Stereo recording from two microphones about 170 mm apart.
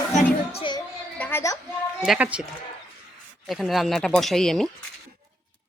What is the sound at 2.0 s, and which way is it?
Speech, 10° right (ahead or behind).